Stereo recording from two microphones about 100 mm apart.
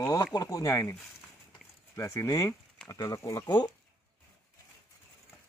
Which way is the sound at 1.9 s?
30° left (ahead or behind).